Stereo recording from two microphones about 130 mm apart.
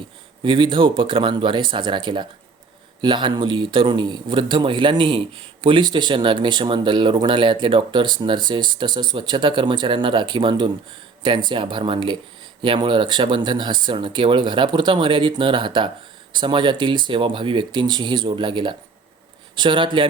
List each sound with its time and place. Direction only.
0.4 s speech: 40° right (ahead or behind)